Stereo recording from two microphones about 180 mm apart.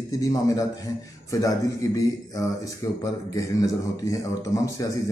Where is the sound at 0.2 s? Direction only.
20° left (ahead or behind).